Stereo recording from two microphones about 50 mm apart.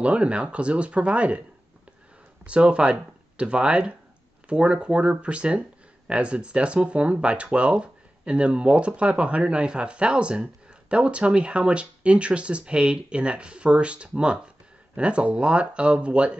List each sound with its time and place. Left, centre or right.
0.0 s speech: right
2.4 s speech: right